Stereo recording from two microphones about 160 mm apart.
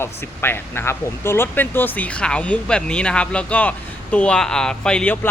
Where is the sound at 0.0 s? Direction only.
15° left (ahead or behind).